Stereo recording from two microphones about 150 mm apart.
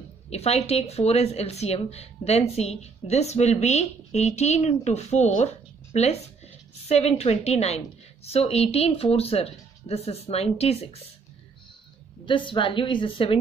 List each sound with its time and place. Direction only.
0.3 s a woman's voice: 45° left (ahead or behind)
12.3 s a woman's voice: 35° left (ahead or behind)